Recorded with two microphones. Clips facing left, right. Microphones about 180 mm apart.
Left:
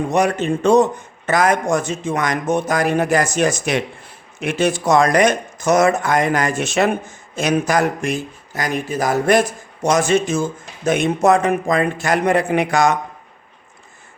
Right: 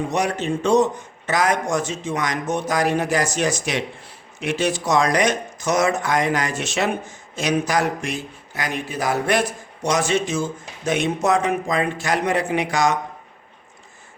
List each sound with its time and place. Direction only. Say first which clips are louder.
0.1 s speech: left 5 dB; 55° left (ahead or behind)